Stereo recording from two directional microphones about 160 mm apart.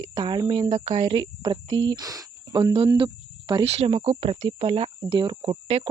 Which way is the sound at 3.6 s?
40° right (ahead or behind).